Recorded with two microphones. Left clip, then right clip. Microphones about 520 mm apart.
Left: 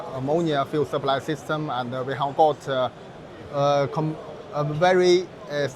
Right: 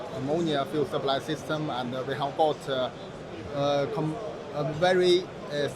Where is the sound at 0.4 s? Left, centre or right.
Left.